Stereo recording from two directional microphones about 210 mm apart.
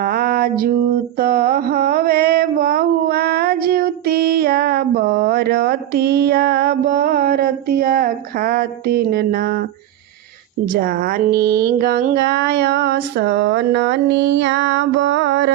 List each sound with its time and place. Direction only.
0.0 s music: 45° right (ahead or behind)
1.2 s mantra: 45° right (ahead or behind)
10.7 s mantra: 45° right (ahead or behind)